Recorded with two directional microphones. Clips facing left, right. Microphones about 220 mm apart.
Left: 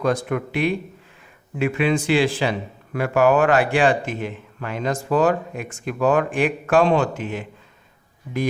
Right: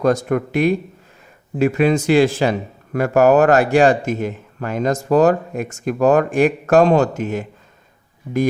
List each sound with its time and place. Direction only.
0.0 s speech: 45° right (ahead or behind)